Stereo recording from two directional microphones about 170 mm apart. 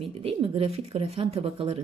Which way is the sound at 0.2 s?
35° right (ahead or behind).